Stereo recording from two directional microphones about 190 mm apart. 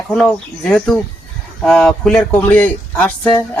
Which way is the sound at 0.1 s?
5° left (ahead or behind).